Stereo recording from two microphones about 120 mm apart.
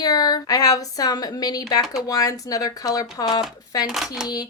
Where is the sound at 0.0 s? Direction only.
35° left (ahead or behind).